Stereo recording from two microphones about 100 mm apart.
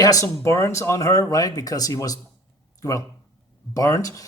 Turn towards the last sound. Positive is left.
turn(degrees=35)  # may be behind; listen again after turning